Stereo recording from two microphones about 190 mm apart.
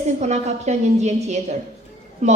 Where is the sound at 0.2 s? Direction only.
35° right (ahead or behind).